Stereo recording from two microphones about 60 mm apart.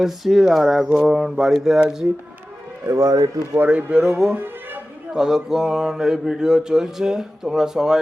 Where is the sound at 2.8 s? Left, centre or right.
Right.